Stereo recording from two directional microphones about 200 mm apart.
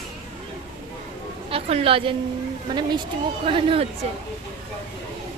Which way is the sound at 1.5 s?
30° right (ahead or behind).